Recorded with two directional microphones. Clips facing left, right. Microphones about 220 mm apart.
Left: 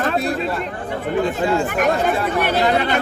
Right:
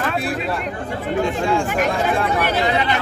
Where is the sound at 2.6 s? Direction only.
50° left (ahead or behind).